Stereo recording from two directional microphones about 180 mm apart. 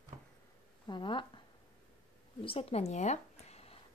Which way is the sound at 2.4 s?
30° left (ahead or behind).